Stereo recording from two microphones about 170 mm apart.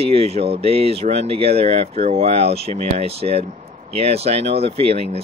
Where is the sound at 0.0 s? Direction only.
35° right (ahead or behind).